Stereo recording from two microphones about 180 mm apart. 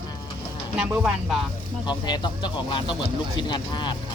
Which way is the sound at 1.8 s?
25° left (ahead or behind).